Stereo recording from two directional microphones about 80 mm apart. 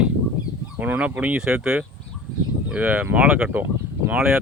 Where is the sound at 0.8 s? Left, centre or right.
Centre.